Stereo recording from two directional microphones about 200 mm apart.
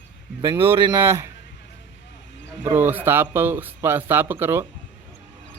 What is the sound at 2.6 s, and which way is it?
Speech, 10° right (ahead or behind).